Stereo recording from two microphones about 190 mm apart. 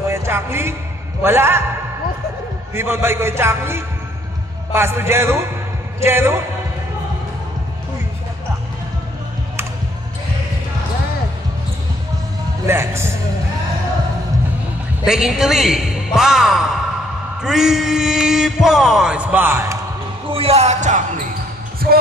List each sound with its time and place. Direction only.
0.1 s a man's voice: 15° right (ahead or behind)
2.7 s a man's voice: 15° right (ahead or behind)
12.6 s a man's voice: 15° right (ahead or behind)
15.0 s a sound: 5° right (ahead or behind)
20.3 s speech: 35° right (ahead or behind)
21.8 s heart sounds: 55° right (ahead or behind)